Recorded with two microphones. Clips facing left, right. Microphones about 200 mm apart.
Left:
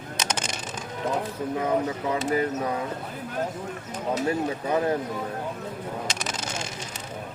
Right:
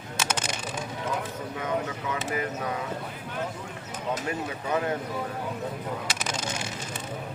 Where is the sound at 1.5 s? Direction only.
35° left (ahead or behind).